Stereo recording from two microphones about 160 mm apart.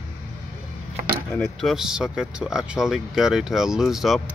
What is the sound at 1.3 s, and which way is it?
Speech, centre (ahead or behind).